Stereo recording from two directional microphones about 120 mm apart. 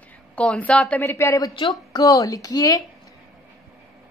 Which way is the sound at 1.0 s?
20° left (ahead or behind).